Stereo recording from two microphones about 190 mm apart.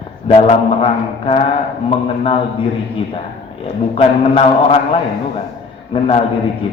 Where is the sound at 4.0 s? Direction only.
30° left (ahead or behind).